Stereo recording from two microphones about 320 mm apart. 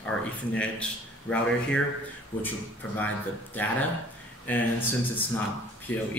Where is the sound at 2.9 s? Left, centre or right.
Centre.